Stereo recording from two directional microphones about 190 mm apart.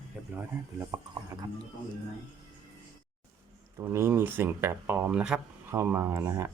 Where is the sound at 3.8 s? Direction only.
15° right (ahead or behind).